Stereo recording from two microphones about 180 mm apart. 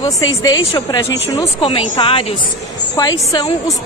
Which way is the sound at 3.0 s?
20° left (ahead or behind).